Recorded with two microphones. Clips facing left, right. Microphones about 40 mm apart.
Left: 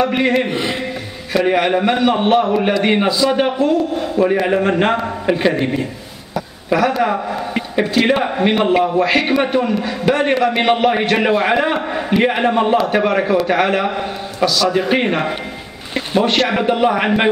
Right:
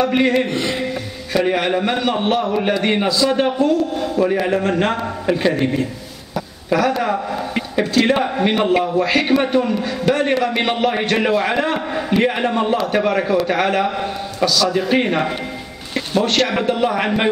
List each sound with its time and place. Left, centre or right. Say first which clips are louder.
0.0 s a man's voice: left 1 dB; centre